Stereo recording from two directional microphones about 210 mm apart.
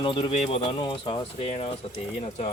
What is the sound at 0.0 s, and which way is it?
Speech, 25° left (ahead or behind).